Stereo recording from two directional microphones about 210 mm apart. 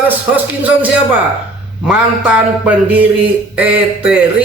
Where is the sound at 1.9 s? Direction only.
5° right (ahead or behind).